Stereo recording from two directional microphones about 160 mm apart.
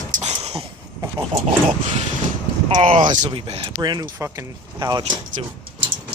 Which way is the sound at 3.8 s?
25° right (ahead or behind).